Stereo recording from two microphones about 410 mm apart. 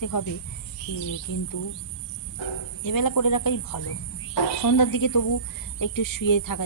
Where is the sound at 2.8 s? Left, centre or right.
Left.